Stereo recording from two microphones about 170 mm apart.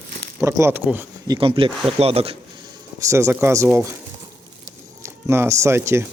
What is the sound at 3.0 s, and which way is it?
Speech, 15° right (ahead or behind).